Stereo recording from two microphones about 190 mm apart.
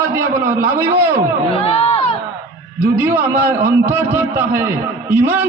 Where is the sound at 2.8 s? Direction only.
10° right (ahead or behind).